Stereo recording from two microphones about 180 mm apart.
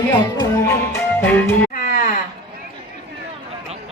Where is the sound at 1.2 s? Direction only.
10° left (ahead or behind).